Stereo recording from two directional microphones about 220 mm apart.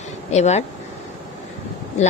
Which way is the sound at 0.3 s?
30° left (ahead or behind).